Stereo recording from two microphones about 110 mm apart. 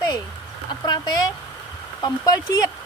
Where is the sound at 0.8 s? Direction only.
40° left (ahead or behind).